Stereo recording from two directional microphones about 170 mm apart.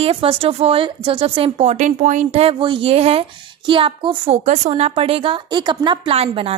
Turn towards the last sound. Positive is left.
turn(degrees=-35)  # may be behind; listen again after turning